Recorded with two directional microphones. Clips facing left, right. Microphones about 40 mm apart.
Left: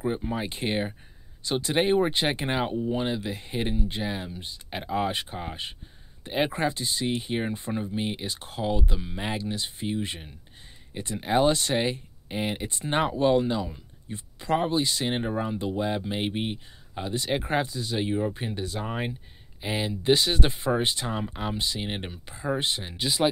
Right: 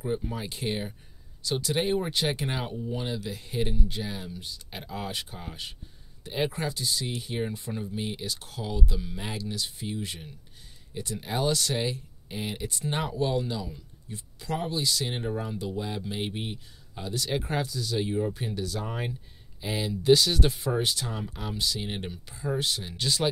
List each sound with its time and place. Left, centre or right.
0.0 s speech: left